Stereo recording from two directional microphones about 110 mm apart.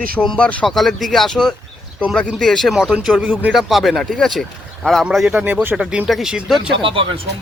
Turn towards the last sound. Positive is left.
turn(degrees=-55)  # may be behind; listen again after turning